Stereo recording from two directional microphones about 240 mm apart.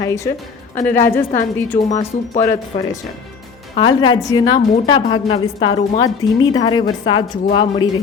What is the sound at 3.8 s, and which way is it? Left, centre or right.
A woman's voice, centre.